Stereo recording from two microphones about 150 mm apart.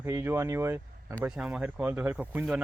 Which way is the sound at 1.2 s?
5° right (ahead or behind).